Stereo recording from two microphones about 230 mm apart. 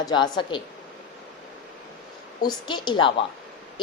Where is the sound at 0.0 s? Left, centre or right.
Centre.